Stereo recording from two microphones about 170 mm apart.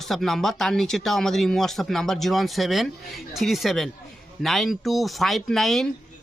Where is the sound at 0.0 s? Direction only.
Centre (ahead or behind).